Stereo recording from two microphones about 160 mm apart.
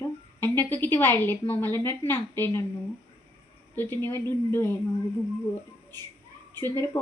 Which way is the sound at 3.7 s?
15° left (ahead or behind).